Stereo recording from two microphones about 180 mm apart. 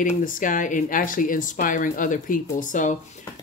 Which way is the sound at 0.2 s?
45° left (ahead or behind).